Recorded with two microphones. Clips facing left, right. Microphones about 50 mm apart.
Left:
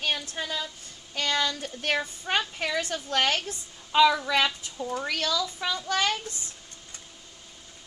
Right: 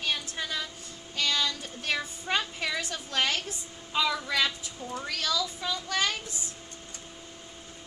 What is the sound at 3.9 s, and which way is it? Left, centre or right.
Speech, left.